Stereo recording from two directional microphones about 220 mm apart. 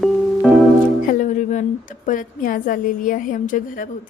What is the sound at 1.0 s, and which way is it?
A woman's voice, 35° left (ahead or behind).